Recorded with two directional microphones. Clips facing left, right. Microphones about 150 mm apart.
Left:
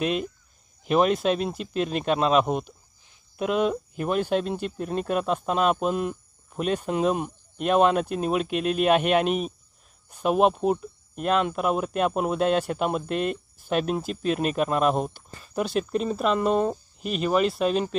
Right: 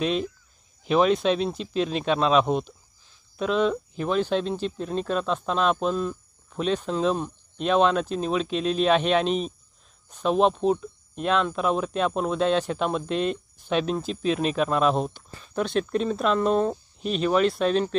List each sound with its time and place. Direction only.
0.0 s speech: 5° left (ahead or behind)
1.7 s speech: 50° left (ahead or behind)
2.0 s speech: 5° left (ahead or behind)